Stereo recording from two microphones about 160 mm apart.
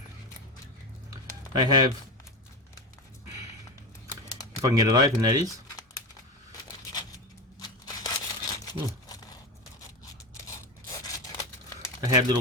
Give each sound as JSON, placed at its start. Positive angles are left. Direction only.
{"t": 1.1, "sound": "typing", "side_deg": -25}
{"t": 4.6, "sound": "speech", "side_deg": -20}
{"t": 7.9, "sound": "a sound", "side_deg": 25}
{"t": 10.3, "sound": "scissors", "side_deg": 20}
{"t": 11.9, "sound": "speech", "side_deg": -25}